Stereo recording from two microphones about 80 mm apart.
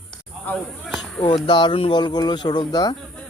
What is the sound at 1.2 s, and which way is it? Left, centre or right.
Speech, left.